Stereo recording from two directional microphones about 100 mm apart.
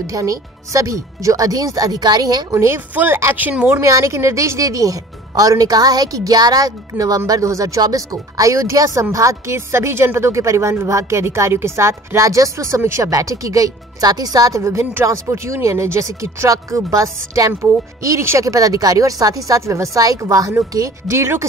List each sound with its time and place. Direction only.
0.0 s a woman's voice: 35° right (ahead or behind)
2.5 s a woman's voice: 30° right (ahead or behind)